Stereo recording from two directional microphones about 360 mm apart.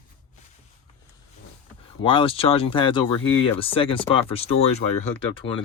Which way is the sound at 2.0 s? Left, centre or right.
Centre.